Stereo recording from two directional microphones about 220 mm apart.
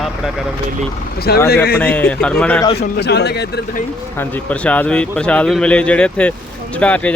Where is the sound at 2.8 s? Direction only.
50° left (ahead or behind).